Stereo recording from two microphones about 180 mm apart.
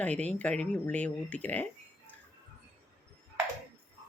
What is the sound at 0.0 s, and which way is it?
Speech, 10° left (ahead or behind).